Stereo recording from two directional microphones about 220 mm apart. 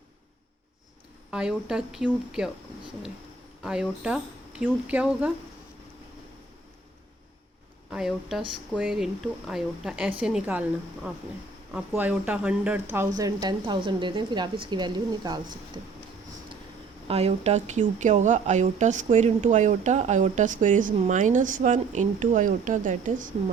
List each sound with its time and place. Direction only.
1.3 s a woman's voice: 5° right (ahead or behind)
3.6 s a woman's voice: 5° right (ahead or behind)
7.9 s a woman's voice: centre (ahead or behind); by 15.8 s 20° right (ahead or behind)
17.1 s speech: 30° right (ahead or behind)